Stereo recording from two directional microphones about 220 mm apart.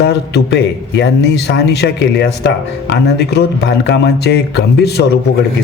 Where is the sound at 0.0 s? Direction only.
50° left (ahead or behind).